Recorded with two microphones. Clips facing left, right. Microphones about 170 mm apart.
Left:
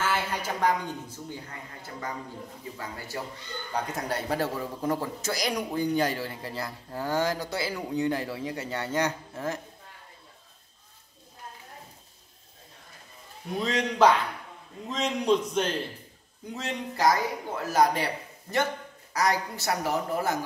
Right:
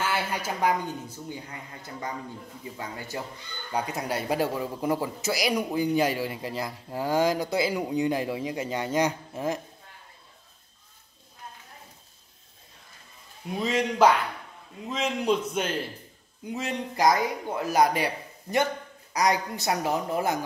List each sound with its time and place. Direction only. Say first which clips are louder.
0.0 s a sound: even; 15° right (ahead or behind)
0.6 s speech: right 1 dB; 10° right (ahead or behind)
3.1 s speech: even; 20° right (ahead or behind)
13.6 s a man's voice: right 1 dB; 5° right (ahead or behind)